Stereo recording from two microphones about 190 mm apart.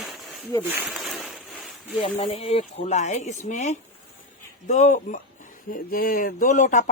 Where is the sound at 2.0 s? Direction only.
30° left (ahead or behind).